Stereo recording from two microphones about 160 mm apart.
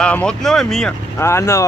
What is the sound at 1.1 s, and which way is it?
Speech, 15° left (ahead or behind).